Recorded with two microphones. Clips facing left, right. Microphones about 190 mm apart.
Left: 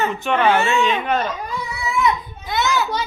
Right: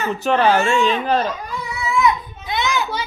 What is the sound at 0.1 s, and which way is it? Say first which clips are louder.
Speech: right 1 dB; 40° right (ahead or behind).